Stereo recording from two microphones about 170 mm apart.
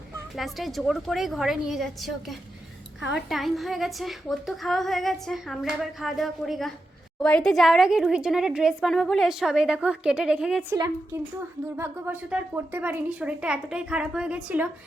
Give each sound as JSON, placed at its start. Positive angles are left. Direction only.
{"t": 0.3, "sound": "a woman's voice", "side_deg": 0}
{"t": 10.8, "sound": "a woman's voice", "side_deg": -20}